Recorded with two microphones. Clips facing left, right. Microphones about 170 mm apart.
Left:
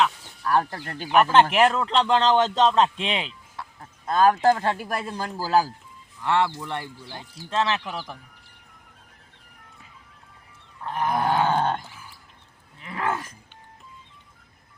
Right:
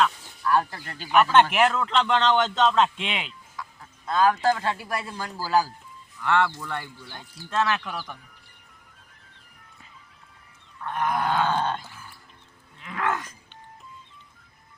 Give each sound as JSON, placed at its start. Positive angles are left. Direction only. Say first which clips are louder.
{"t": 0.4, "sound": "speech", "louder": "even", "side_deg": 35}
{"t": 0.9, "sound": "speech", "louder": "left 1 dB", "side_deg": 45}
{"t": 1.3, "sound": "speech", "louder": "left 2 dB", "side_deg": 30}
{"t": 4.0, "sound": "speech", "louder": "left 3 dB", "side_deg": 45}
{"t": 6.1, "sound": "speech", "louder": "even", "side_deg": 25}
{"t": 10.8, "sound": "speech", "louder": "left 2 dB", "side_deg": 30}
{"t": 11.5, "sound": "speech", "louder": "left 3 dB", "side_deg": 45}
{"t": 12.8, "sound": "roaring cats", "louder": "even", "side_deg": 25}